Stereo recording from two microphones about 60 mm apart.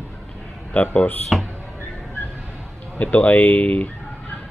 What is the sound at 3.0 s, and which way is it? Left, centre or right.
Speech, left.